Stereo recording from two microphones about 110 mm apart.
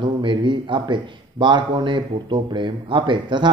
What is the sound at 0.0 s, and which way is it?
A man's voice, 45° right (ahead or behind).